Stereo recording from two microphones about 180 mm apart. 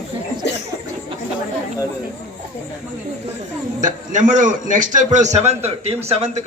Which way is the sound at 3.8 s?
45° right (ahead or behind).